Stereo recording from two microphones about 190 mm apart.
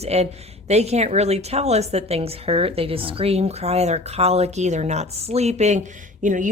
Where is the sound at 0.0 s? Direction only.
35° right (ahead or behind).